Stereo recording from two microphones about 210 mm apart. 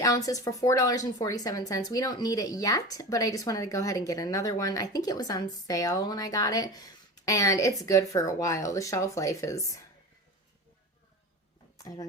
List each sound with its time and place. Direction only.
0.0 s speech: 15° left (ahead or behind)
11.8 s speech: 15° left (ahead or behind)